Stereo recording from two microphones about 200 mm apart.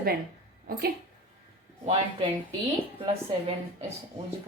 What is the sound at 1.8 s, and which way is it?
Speech, 30° right (ahead or behind).